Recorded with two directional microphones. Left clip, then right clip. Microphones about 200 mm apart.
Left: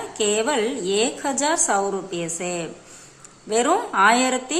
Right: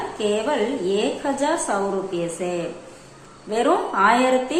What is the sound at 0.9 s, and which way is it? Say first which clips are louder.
Speech: left 1 dB; 30° left (ahead or behind).